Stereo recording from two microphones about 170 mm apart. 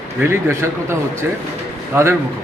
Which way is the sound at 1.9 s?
15° right (ahead or behind).